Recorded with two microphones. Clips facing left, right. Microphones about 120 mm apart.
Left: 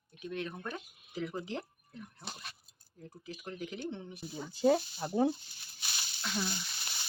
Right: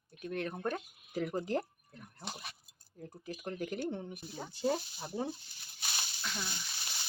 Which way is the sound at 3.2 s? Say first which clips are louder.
Right 3 dB; 50° right (ahead or behind).